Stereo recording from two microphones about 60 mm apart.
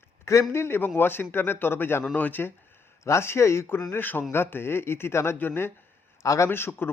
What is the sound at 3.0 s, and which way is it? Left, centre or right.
Speech, left.